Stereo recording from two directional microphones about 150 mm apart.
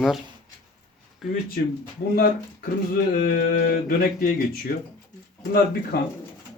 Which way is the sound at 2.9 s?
80° left.